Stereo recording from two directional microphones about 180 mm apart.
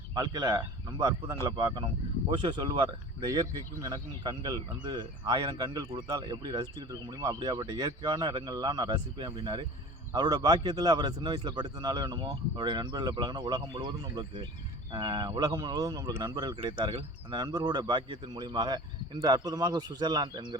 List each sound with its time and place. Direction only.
0.1 s speech: 20° right (ahead or behind)